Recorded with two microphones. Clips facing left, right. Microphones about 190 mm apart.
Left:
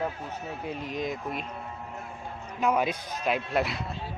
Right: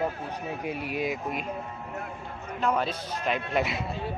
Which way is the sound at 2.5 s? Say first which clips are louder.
Left 1 dB; 10° left (ahead or behind).